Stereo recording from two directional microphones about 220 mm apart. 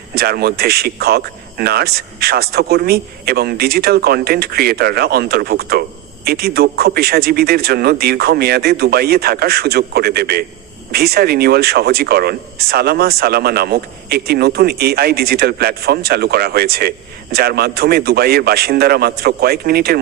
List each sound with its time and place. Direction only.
0.1 s speech: 45° right (ahead or behind)